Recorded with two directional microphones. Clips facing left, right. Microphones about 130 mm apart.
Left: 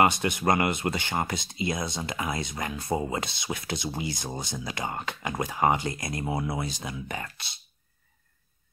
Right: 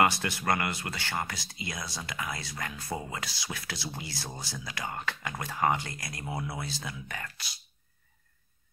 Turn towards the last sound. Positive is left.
turn(degrees=25)  # may be behind; listen again after turning